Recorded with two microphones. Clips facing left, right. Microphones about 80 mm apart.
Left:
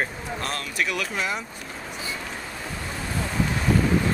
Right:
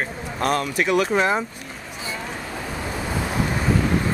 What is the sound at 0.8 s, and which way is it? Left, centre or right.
Speech, right.